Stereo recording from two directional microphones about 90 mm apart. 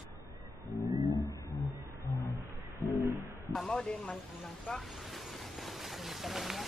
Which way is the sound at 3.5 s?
5° left (ahead or behind).